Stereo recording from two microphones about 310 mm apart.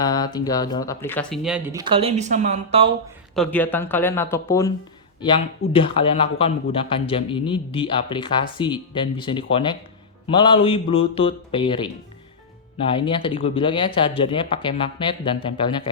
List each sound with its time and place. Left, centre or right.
0.0 s speech: centre
3.3 s speech: centre